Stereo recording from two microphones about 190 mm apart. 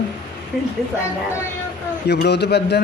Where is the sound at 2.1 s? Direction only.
60° left (ahead or behind).